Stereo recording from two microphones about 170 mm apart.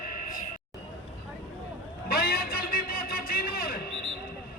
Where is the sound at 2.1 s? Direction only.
60° left (ahead or behind).